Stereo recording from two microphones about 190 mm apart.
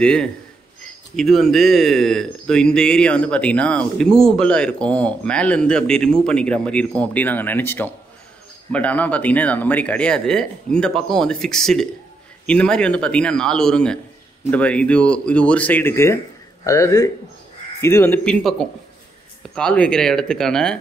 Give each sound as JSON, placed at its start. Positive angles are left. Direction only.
{"t": 0.0, "sound": "speech", "side_deg": 5}